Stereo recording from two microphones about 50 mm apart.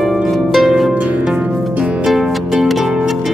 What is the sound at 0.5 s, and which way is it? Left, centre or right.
Harp, centre.